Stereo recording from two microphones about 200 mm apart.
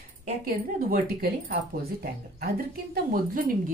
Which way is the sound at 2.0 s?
50° right (ahead or behind).